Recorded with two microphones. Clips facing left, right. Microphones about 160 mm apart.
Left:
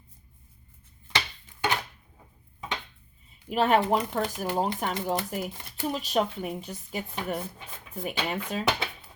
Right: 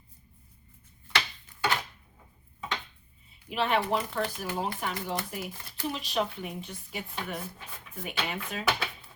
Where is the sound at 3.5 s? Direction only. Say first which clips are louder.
Left 5 dB; 45° left (ahead or behind).